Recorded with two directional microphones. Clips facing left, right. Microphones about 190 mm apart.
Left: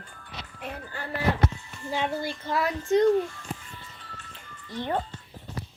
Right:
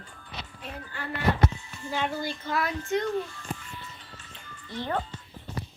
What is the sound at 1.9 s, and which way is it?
Speech, 25° left (ahead or behind).